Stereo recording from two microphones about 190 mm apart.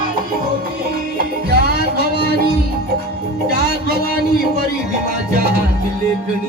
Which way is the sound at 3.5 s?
55° right (ahead or behind).